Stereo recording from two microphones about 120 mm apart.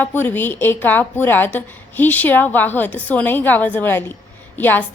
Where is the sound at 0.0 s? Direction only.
15° left (ahead or behind).